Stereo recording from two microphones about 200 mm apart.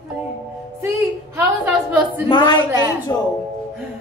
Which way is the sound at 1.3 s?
10° right (ahead or behind).